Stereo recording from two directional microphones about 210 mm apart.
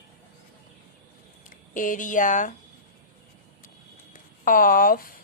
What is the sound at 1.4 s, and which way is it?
Speech, 40° left (ahead or behind).